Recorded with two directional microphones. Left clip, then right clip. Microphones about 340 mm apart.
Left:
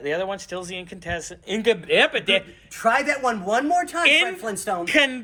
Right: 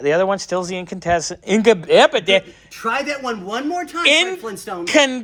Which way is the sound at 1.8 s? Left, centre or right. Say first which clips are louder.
Right 6 dB; right.